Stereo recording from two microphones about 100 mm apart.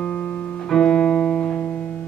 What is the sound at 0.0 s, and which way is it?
Music, 10° left (ahead or behind).